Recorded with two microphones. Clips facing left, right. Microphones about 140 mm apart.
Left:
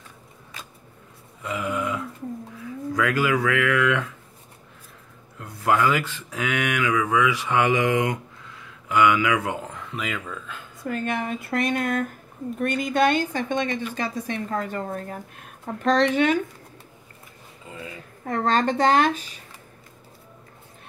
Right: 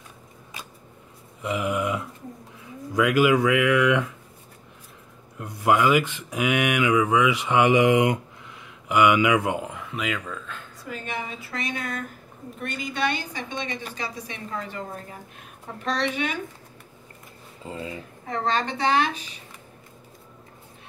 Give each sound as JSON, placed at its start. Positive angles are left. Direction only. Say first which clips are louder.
{"t": 1.4, "sound": "a sound", "louder": "right 2 dB", "side_deg": -20}
{"t": 2.5, "sound": "speech", "louder": "right 3 dB", "side_deg": -20}
{"t": 5.4, "sound": "speech", "louder": "right 1 dB", "side_deg": -20}
{"t": 10.8, "sound": "a woman's voice", "louder": "left 7 dB", "side_deg": 55}
{"t": 17.6, "sound": "a sound", "louder": "right 5 dB", "side_deg": -25}
{"t": 18.2, "sound": "a woman's voice", "louder": "left 4 dB", "side_deg": 50}